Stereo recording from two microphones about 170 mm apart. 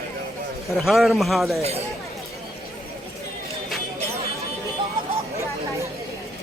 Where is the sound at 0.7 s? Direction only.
Centre (ahead or behind).